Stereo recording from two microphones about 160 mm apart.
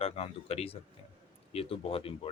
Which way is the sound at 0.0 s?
40° left (ahead or behind).